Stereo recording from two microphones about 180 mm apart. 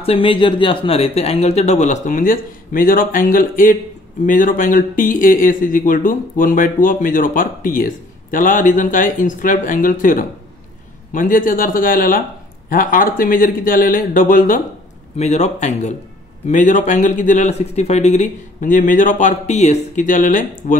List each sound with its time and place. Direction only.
0.0 s speech: 30° left (ahead or behind); by 14.6 s 50° left (ahead or behind)
15.1 s speech: 40° left (ahead or behind)